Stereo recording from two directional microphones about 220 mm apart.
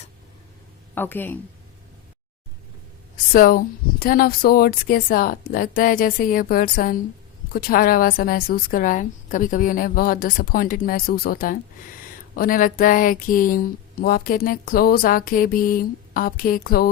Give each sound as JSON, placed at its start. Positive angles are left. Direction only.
{"t": 0.9, "sound": "speech", "side_deg": 10}
{"t": 3.3, "sound": "speech", "side_deg": 40}